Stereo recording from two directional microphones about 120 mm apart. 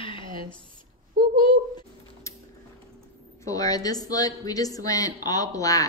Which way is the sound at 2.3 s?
25° left (ahead or behind).